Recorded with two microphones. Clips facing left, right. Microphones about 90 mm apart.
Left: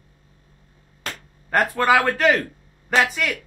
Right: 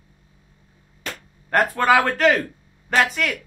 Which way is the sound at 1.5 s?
Centre (ahead or behind).